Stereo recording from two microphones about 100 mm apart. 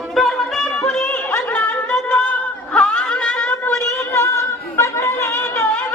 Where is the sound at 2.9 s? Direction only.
10° left (ahead or behind).